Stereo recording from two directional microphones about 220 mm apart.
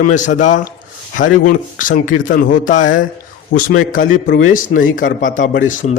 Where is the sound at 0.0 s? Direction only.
35° left (ahead or behind).